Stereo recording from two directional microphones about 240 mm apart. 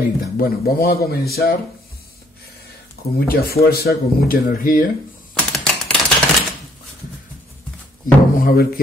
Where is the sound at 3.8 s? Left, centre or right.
Left.